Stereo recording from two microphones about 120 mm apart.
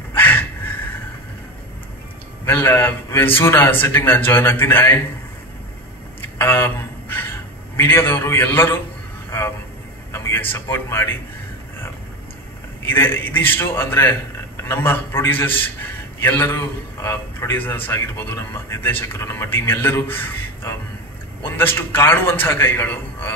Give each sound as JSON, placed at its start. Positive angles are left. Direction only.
{"t": 0.1, "sound": "a sound", "side_deg": 15}
{"t": 2.4, "sound": "a man's voice", "side_deg": 20}
{"t": 6.2, "sound": "a sound", "side_deg": 20}
{"t": 9.3, "sound": "vehicle", "side_deg": 20}
{"t": 10.1, "sound": "a man's voice", "side_deg": 15}
{"t": 12.8, "sound": "a man's voice", "side_deg": 20}